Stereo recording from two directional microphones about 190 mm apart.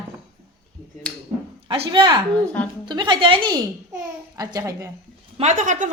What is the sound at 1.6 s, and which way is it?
A woman's voice, 25° right (ahead or behind).